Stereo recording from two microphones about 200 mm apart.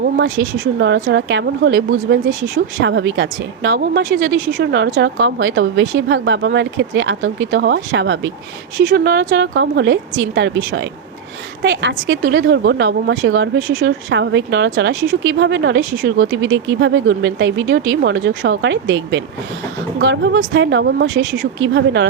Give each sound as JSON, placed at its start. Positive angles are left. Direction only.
{"t": 0.0, "sound": "speech", "side_deg": -60}